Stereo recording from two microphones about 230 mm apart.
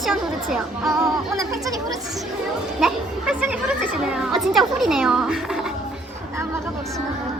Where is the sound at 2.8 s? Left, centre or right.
Centre.